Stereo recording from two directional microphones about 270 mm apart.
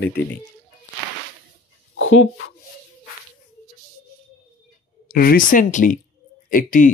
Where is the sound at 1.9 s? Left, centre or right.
Left.